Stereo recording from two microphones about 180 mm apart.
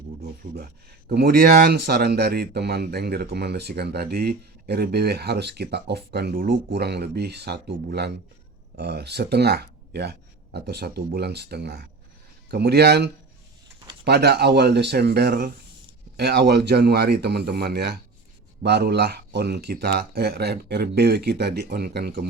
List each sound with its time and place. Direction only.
0.2 s speech: 60° right (ahead or behind)
6.7 s speech: 65° right (ahead or behind)